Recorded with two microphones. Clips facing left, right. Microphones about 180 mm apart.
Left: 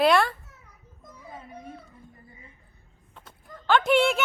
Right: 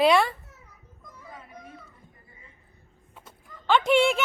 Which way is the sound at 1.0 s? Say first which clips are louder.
Left 3 dB; 30° left (ahead or behind).